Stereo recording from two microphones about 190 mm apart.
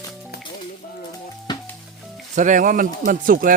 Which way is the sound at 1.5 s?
20° left (ahead or behind).